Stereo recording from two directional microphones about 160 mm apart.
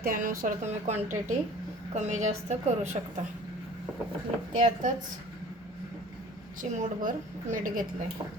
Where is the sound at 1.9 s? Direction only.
45° right (ahead or behind).